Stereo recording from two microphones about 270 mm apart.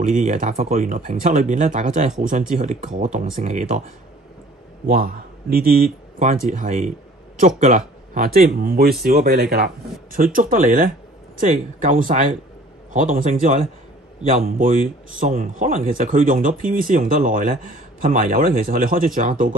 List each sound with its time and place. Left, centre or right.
0.0 s speech: right
4.8 s a man's voice: right